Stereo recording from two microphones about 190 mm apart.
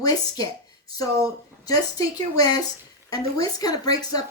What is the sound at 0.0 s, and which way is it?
A woman's voice, 20° left (ahead or behind).